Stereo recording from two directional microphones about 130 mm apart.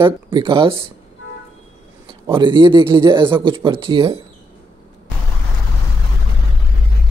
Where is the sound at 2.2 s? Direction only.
40° right (ahead or behind).